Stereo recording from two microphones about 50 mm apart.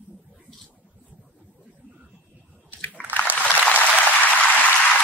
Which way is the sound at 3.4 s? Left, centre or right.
Left.